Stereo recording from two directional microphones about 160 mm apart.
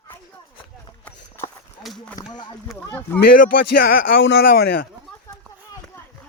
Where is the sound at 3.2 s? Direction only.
75° left (ahead or behind).